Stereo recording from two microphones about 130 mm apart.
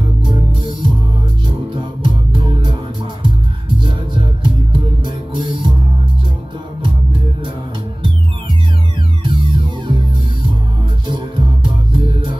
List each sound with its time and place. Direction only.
0.2 s music: 40° right (ahead or behind)
4.4 s music: 40° right (ahead or behind)
9.2 s music: 40° right (ahead or behind)
11.1 s music: 35° right (ahead or behind)